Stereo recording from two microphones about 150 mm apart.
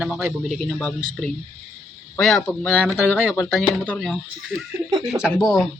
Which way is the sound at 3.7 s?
5° left (ahead or behind).